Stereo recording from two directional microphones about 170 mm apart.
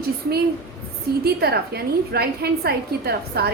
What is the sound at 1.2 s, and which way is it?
A woman's voice, 70° right (ahead or behind).